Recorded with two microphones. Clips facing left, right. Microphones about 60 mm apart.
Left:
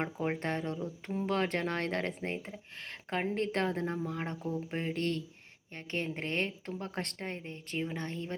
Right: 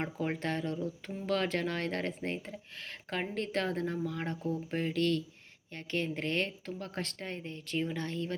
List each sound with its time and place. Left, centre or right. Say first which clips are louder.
0.2 s a woman's voice: right 2 dB; left
7.0 s a woman's voice: even; left
7.3 s a woman's voice: right 1 dB; left